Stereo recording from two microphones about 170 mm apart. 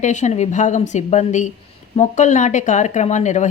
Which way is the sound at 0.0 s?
45° left (ahead or behind).